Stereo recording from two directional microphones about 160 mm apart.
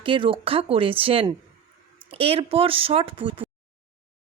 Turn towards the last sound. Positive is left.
turn(degrees=-35)  # may be behind; listen again after turning